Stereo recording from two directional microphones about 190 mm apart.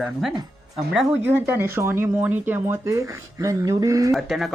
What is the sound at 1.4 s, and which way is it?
Speech, 10° right (ahead or behind).